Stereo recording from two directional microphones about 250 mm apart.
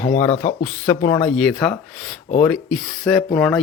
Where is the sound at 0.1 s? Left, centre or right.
Left.